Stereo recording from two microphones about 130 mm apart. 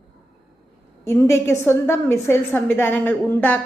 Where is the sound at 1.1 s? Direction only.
20° left (ahead or behind).